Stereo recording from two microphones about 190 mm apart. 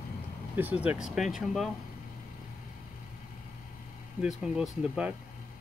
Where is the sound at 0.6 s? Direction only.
10° right (ahead or behind).